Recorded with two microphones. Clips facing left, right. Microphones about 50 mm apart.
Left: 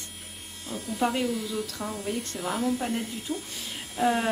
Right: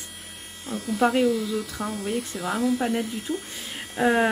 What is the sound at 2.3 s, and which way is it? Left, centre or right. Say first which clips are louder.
Speech: right 3 dB; right.